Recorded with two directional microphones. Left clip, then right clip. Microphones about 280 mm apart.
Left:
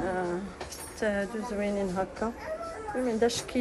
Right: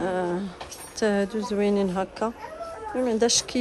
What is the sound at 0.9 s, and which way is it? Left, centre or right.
Speech, right.